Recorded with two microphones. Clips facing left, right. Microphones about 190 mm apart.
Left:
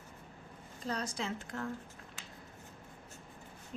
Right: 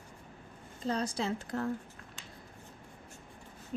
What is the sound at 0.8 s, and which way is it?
Speech, 30° right (ahead or behind).